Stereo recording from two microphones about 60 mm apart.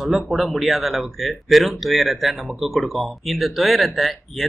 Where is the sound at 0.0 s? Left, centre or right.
Centre.